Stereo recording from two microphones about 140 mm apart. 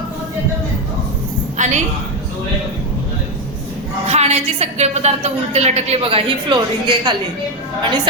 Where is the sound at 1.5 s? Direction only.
60° right (ahead or behind).